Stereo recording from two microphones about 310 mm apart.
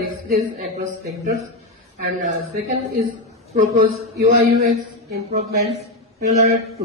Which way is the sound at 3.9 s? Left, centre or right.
Right.